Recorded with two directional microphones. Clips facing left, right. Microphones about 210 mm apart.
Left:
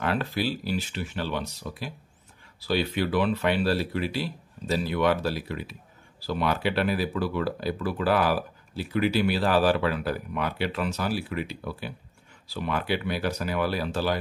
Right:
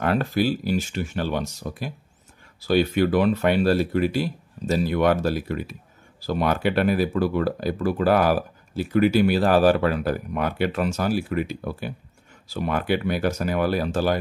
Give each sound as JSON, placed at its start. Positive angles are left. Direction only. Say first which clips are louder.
{"t": 0.0, "sound": "speech", "louder": "right 5 dB", "side_deg": -45}